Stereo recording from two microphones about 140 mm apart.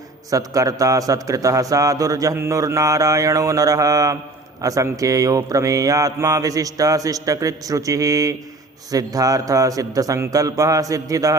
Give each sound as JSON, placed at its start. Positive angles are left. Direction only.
{"t": 0.3, "sound": "a man's voice", "side_deg": -25}